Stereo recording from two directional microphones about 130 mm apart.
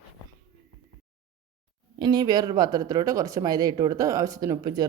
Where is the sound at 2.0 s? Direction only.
30° right (ahead or behind).